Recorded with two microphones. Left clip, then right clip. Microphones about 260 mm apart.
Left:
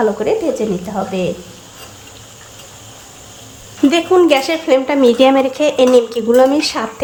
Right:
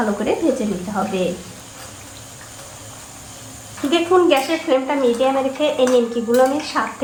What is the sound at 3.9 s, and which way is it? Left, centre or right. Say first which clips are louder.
Speech: left 2 dB; left.